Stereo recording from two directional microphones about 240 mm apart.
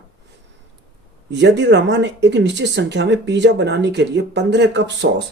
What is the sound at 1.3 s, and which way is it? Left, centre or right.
Speech, right.